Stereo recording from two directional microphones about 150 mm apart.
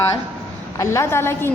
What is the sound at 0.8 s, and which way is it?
Speech, 20° left (ahead or behind).